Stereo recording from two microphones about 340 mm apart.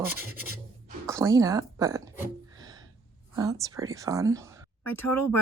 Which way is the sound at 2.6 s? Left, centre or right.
Centre.